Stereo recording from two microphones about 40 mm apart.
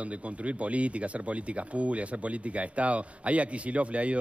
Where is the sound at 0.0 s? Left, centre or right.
Right.